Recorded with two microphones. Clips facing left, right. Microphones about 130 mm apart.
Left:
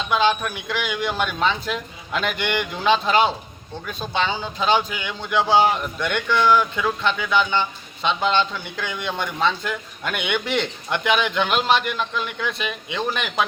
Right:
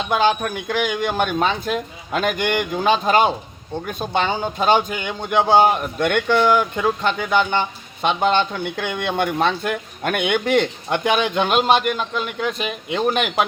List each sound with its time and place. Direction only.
0.1 s speech: 45° right (ahead or behind)
13.1 s speech: 55° right (ahead or behind)